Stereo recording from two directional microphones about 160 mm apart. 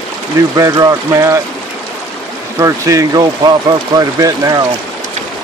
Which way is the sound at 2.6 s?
20° right (ahead or behind).